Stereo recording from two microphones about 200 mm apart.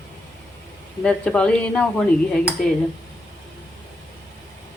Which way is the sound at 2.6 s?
45° left (ahead or behind).